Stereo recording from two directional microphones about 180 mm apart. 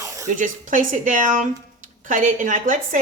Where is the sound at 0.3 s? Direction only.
45° right (ahead or behind).